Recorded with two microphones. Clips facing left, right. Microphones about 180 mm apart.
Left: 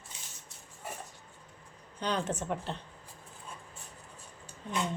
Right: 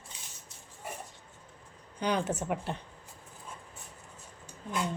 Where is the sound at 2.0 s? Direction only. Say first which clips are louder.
Right 2 dB; 10° right (ahead or behind).